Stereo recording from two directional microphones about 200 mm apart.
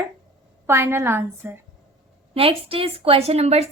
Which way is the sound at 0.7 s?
15° right (ahead or behind).